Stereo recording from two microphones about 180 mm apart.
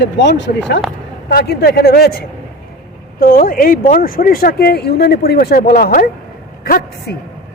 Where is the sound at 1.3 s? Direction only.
65° left (ahead or behind).